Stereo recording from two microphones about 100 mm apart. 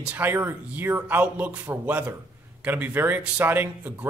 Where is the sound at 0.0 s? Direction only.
15° right (ahead or behind).